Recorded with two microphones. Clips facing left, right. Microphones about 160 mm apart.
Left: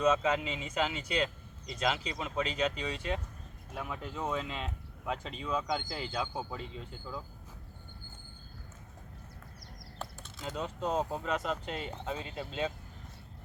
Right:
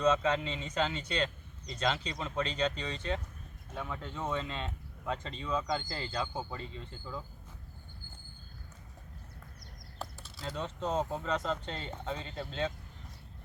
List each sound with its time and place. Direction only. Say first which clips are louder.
0.0 s speech: even; 10° left (ahead or behind)
10.0 s mechanisms: even; centre (ahead or behind)
10.4 s speech: left 1 dB; 15° left (ahead or behind)